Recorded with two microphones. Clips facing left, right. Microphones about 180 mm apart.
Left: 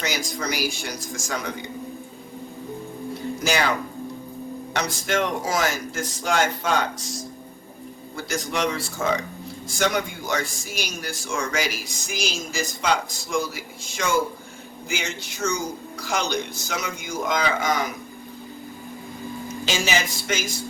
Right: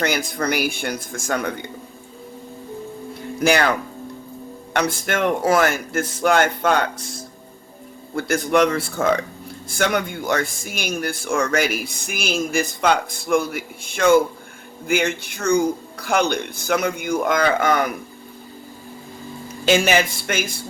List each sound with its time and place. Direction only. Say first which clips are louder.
0.0 s speech: right 6 dB; 55° right (ahead or behind)
3.4 s speech: right 6 dB; 60° right (ahead or behind)
4.7 s speech: right 4 dB; 55° right (ahead or behind)
19.6 s speech: right 8 dB; 55° right (ahead or behind)